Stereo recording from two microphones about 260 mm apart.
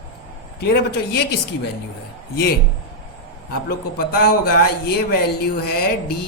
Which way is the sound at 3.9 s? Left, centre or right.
Left.